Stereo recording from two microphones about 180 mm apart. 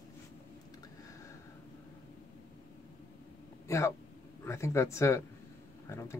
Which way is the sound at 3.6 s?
15° left (ahead or behind).